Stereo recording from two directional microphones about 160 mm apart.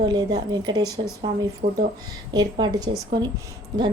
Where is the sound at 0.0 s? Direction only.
25° right (ahead or behind).